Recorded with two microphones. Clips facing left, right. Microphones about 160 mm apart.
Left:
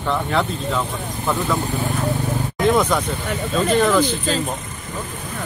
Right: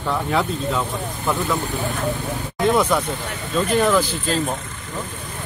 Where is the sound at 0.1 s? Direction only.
5° right (ahead or behind).